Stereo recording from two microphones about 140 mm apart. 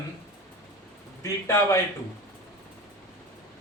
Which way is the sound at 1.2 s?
20° left (ahead or behind).